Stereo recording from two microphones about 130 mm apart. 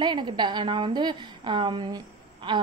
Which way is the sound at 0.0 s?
35° right (ahead or behind).